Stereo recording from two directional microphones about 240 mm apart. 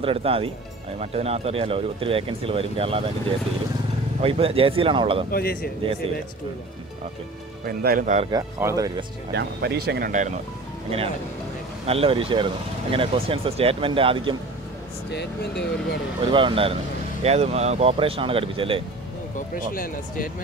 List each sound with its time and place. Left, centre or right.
0.0 s speech: right
5.3 s speech: left
7.6 s speech: right
8.3 s speech: centre
9.3 s speech: right
11.8 s speech: right
15.0 s speech: left
16.3 s speech: right
19.3 s speech: left